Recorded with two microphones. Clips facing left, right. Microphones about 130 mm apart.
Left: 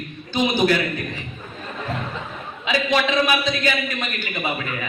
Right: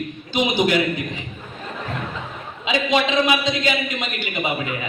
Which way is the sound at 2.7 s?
20° right (ahead or behind).